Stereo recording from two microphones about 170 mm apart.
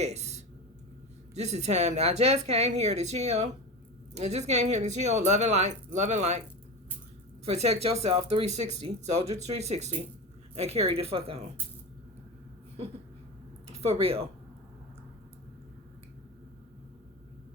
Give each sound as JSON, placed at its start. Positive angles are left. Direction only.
{"t": 0.0, "sound": "a sound", "side_deg": -40}
{"t": 1.3, "sound": "a woman's voice", "side_deg": -40}
{"t": 7.4, "sound": "a woman's voice", "side_deg": -40}
{"t": 13.7, "sound": "speech", "side_deg": -35}